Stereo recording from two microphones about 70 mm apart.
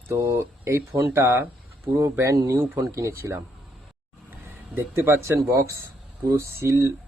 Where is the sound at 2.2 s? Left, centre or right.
Right.